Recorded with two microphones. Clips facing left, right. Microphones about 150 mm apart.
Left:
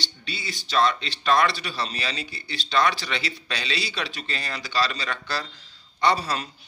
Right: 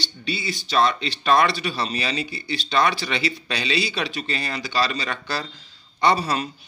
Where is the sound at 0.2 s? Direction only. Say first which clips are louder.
Right 9 dB; 10° right (ahead or behind).